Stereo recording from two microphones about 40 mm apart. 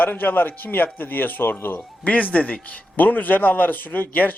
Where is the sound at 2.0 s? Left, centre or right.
Left.